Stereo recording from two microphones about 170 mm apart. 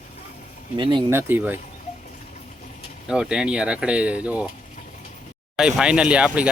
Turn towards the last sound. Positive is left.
turn(degrees=-5)  # may be behind; listen again after turning